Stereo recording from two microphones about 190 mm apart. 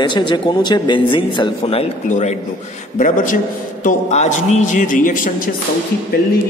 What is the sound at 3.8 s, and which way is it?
A man's voice, 40° left (ahead or behind).